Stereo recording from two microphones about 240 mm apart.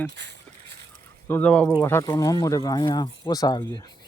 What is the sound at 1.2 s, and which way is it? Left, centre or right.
Speech, centre.